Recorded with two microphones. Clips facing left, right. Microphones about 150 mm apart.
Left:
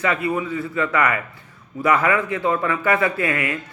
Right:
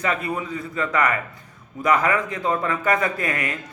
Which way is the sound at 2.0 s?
35° right (ahead or behind).